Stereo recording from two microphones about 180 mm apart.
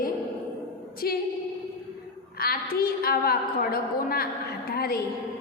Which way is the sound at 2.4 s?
55° left (ahead or behind).